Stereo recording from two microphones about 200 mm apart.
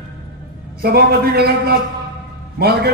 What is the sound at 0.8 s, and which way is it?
A man's voice, 50° right (ahead or behind).